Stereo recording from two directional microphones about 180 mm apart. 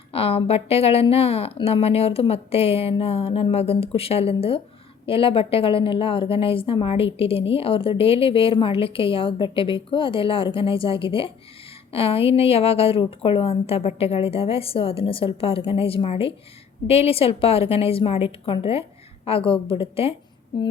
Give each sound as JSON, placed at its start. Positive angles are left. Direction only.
{"t": 0.1, "sound": "a woman's voice", "side_deg": 35}